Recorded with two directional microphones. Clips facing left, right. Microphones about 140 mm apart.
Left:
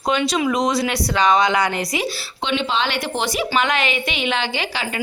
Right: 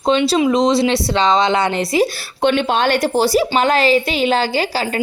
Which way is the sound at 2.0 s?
50° right (ahead or behind).